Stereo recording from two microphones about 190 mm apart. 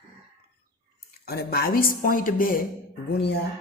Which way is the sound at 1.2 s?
55° left (ahead or behind).